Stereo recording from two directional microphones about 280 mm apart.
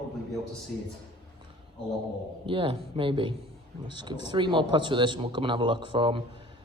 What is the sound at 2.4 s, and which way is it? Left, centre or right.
A man's voice, centre.